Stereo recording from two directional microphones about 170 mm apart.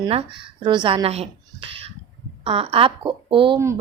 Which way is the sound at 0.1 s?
30° right (ahead or behind).